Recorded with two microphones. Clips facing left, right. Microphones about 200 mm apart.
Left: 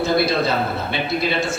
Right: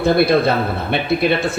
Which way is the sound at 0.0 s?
55° right (ahead or behind).